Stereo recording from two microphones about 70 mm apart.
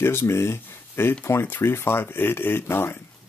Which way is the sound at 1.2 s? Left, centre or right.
Left.